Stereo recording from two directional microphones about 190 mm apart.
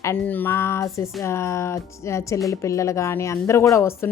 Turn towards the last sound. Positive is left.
turn(degrees=15)  # may be behind; listen again after turning